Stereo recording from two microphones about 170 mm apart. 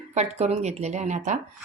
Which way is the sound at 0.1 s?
40° right (ahead or behind).